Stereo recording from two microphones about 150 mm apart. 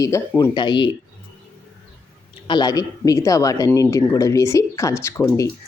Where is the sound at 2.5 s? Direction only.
25° left (ahead or behind).